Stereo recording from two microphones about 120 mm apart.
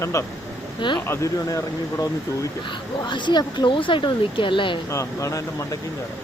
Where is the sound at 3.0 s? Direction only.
40° left (ahead or behind).